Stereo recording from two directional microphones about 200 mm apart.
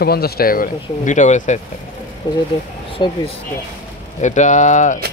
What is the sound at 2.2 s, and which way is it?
Speech, 20° left (ahead or behind).